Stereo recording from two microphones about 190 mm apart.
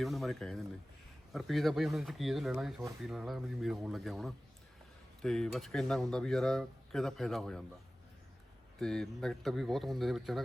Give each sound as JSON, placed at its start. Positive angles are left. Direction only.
{"t": 0.0, "sound": "speech", "side_deg": 0}
{"t": 8.8, "sound": "speech", "side_deg": 5}